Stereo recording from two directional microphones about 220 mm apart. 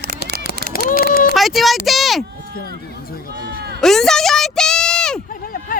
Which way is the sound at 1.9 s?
Centre (ahead or behind).